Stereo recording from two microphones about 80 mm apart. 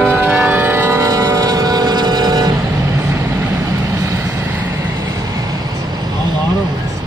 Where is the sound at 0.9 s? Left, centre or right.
Right.